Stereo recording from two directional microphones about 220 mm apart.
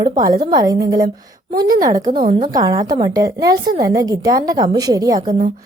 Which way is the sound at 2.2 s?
40° right (ahead or behind).